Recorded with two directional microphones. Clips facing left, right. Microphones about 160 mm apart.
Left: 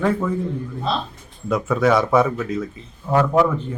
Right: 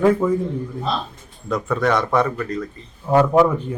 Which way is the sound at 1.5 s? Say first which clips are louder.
Left 2 dB; centre (ahead or behind).